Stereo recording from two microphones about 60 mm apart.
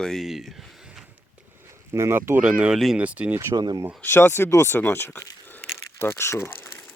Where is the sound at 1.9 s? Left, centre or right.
Right.